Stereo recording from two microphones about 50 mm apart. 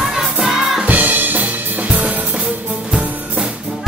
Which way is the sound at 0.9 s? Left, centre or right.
Right.